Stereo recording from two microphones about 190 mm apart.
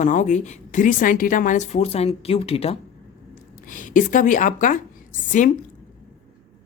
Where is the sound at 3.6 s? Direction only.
45° left (ahead or behind).